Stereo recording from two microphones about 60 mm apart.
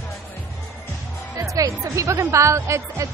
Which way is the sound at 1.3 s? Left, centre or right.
Right.